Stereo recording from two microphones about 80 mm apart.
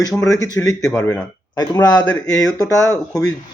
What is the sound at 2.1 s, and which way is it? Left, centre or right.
Speech, centre.